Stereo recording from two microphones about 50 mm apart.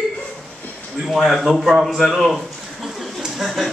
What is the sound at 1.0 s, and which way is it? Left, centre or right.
A man's voice, centre.